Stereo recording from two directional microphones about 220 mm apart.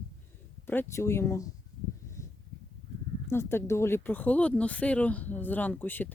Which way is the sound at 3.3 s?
10° left (ahead or behind).